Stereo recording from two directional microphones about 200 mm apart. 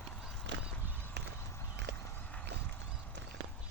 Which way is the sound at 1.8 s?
60° right (ahead or behind).